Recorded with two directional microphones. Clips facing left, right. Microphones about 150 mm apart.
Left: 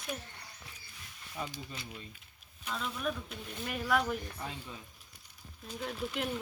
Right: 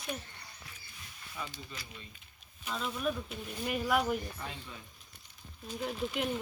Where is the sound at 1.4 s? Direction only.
40° left (ahead or behind).